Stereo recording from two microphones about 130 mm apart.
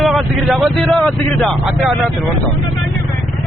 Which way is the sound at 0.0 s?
Centre (ahead or behind).